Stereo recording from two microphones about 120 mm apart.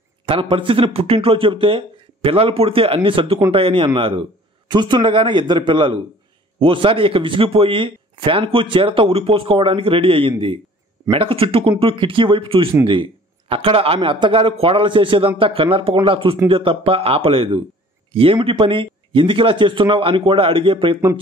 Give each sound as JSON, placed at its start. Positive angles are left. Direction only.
{"t": 0.2, "sound": "a man's voice", "side_deg": -45}